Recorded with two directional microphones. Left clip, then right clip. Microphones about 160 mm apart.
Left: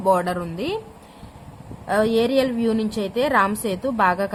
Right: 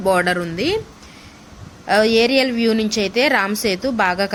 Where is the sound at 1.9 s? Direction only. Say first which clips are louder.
Right 5 dB; 20° right (ahead or behind).